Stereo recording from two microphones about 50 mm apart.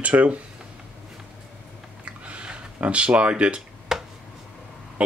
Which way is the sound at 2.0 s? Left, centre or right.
Right.